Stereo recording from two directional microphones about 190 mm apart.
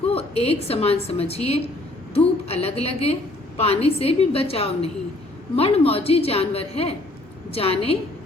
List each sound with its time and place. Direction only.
0.1 s a woman's voice: 30° left (ahead or behind)